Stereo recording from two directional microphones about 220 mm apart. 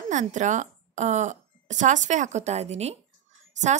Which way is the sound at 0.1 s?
35° right (ahead or behind).